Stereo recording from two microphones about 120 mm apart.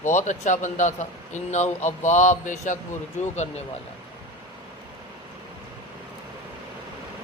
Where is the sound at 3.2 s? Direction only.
70° left (ahead or behind).